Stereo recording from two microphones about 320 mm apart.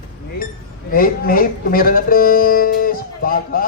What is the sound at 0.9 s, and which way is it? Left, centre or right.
Speech, left.